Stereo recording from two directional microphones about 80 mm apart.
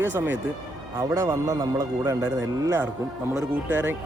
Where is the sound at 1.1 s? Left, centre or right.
Right.